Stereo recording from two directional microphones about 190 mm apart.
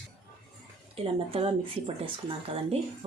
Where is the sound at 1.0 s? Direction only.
30° right (ahead or behind).